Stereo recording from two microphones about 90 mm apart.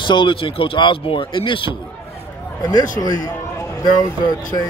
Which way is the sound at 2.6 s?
45° left (ahead or behind).